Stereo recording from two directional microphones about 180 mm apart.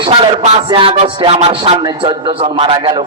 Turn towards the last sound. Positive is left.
turn(degrees=-25)  # may be behind; listen again after turning